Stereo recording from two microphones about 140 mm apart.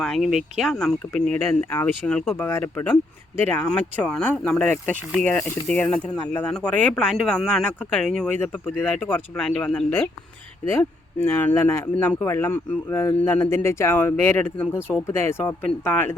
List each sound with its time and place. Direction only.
0.0 s speech: centre (ahead or behind)